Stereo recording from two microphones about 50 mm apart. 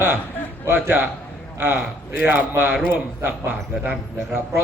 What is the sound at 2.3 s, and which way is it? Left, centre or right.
Speech, right.